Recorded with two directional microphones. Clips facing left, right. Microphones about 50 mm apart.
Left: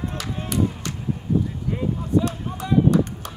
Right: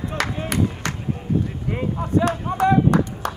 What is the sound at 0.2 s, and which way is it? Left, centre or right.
Clapping, right.